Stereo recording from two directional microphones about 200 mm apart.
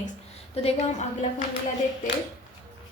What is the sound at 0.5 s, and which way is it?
Speech, 30° left (ahead or behind).